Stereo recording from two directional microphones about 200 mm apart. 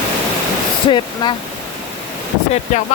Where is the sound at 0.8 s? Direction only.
25° left (ahead or behind).